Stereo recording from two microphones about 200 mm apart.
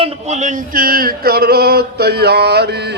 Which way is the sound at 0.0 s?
35° right (ahead or behind).